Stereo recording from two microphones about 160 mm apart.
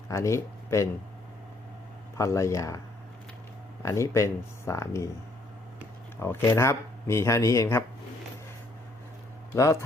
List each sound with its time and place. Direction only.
0.1 s speech: 20° left (ahead or behind)
2.1 s speech: 20° left (ahead or behind)
3.8 s speech: 20° left (ahead or behind)
6.1 s speech: 15° left (ahead or behind)